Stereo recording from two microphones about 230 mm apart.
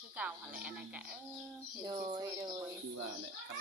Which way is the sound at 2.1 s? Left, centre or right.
Centre.